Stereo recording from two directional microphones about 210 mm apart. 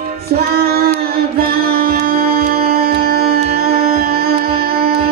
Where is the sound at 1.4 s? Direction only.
45° right (ahead or behind).